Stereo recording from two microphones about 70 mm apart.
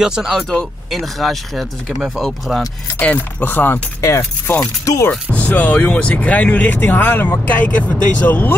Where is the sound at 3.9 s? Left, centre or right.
Left.